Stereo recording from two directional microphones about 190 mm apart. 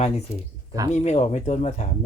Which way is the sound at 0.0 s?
35° left (ahead or behind).